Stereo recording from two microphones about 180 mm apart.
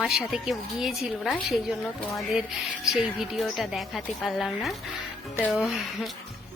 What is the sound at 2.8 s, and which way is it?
A woman's voice, centre (ahead or behind).